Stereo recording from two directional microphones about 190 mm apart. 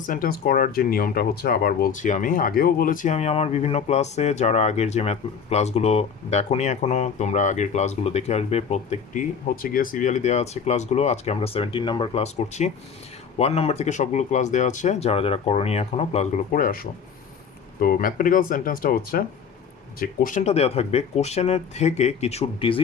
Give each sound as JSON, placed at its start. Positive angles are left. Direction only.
{"t": 0.0, "sound": "speech", "side_deg": 45}
{"t": 9.6, "sound": "speech", "side_deg": 45}